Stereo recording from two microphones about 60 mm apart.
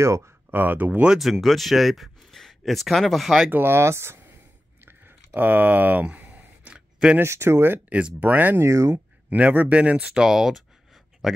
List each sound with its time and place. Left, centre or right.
0.0 s speech: right
0.5 s speech: right
1.2 s speech: centre
3.4 s speech: right
4.8 s a sound: right
6.7 s a sound: centre
7.2 s speech: right
7.9 s speech: right
8.5 s speech: right
9.3 s a man's voice: right; by 11.4 s centre